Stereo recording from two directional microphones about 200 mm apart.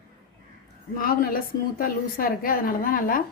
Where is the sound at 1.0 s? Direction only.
45° left (ahead or behind).